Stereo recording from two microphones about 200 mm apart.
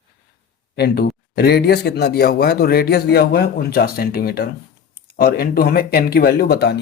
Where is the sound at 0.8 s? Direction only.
50° left (ahead or behind).